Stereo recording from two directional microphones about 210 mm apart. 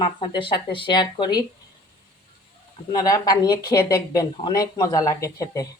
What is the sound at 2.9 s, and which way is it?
Speech, 20° left (ahead or behind).